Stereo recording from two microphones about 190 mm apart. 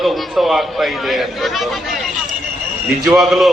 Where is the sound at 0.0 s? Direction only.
Centre (ahead or behind).